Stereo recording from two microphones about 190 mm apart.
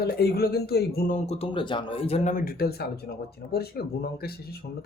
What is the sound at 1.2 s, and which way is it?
Speech, 30° left (ahead or behind).